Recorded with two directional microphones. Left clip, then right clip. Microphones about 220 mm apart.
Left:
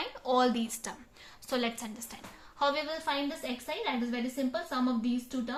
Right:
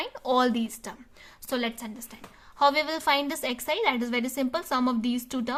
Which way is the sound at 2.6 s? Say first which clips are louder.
Right 7 dB; 40° right (ahead or behind).